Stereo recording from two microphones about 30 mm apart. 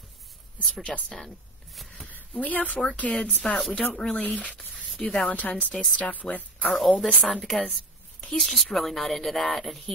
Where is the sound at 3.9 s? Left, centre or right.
Left.